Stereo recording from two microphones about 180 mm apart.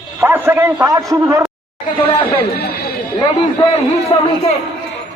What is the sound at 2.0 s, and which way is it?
Speech, 30° left (ahead or behind).